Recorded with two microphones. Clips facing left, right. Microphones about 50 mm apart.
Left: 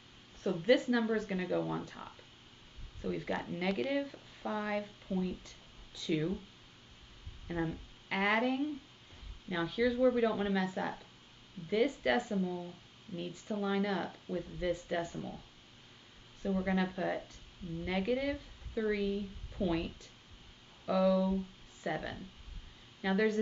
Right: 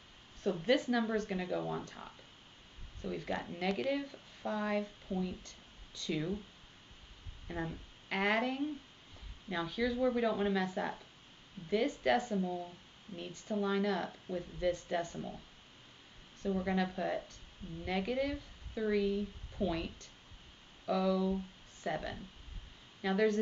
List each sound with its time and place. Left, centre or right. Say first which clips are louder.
0.4 s speech: left 2 dB; centre
7.4 s speech: left 4 dB; centre
12.4 s speech: even; centre
13.2 s speech: right 1 dB; centre
16.4 s speech: left 1 dB; centre